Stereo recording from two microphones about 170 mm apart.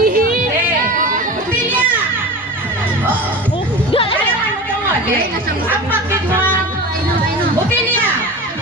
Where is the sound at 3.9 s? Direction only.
35° left (ahead or behind).